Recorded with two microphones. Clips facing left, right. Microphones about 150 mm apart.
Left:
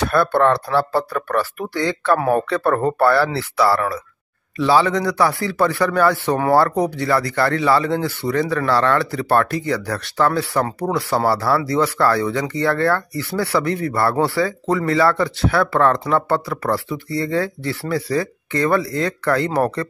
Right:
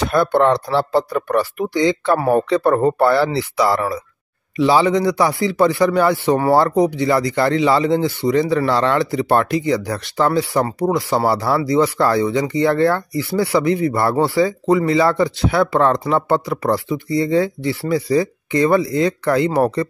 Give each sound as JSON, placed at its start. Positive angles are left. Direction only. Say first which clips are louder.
{"t": 0.0, "sound": "a man's voice", "louder": "right 1 dB", "side_deg": -15}